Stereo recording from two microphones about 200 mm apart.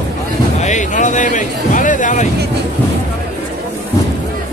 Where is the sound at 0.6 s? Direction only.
40° left (ahead or behind).